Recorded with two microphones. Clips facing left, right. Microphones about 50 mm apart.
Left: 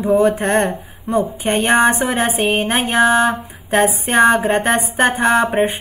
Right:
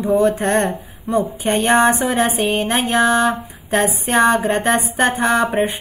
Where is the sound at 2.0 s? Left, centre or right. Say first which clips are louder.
Even; centre.